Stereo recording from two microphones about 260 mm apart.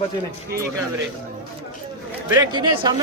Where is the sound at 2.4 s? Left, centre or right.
Centre.